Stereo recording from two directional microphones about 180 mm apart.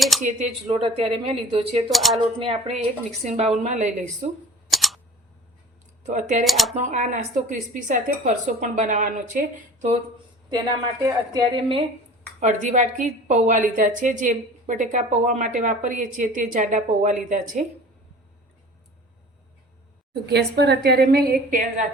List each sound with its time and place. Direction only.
0.2 s a woman's voice: 40° right (ahead or behind)
0.7 s speech: 30° right (ahead or behind)
1.9 s speech: centre (ahead or behind)
2.1 s speech: 35° right (ahead or behind)
4.7 s camera: centre (ahead or behind)
6.1 s a woman's voice: 45° right (ahead or behind)
6.4 s speech: centre (ahead or behind)
6.7 s a woman's voice: 40° right (ahead or behind)
11.0 s a woman's voice: 25° right (ahead or behind)
12.4 s a woman's voice: 40° right (ahead or behind)
20.2 s a woman's voice: 65° right (ahead or behind); by 21.8 s 50° right (ahead or behind)